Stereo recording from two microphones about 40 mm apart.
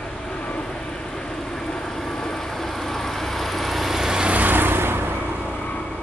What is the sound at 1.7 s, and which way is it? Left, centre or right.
Vehicle, centre.